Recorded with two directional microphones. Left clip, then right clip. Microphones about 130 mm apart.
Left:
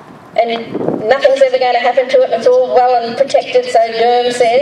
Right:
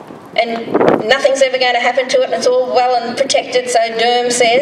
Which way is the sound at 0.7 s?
40° right (ahead or behind).